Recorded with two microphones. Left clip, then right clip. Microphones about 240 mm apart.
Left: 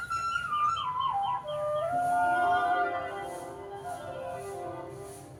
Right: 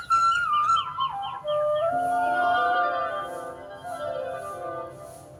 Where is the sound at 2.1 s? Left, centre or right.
Right.